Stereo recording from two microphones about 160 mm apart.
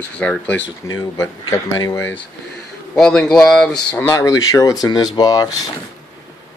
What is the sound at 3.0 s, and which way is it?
Speech, 5° left (ahead or behind).